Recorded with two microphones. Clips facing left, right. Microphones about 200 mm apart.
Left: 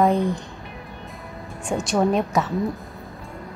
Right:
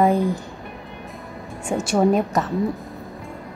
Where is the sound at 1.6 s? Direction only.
5° right (ahead or behind).